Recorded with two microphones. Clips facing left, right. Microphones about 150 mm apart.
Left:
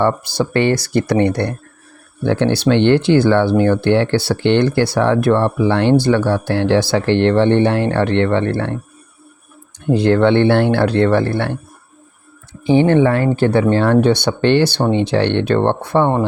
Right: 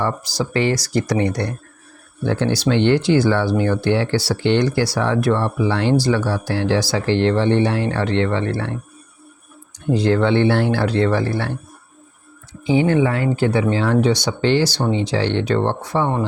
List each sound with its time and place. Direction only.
0.0 s speech: 60° left (ahead or behind)
9.9 s speech: 60° left (ahead or behind)
12.9 s speech: 60° left (ahead or behind)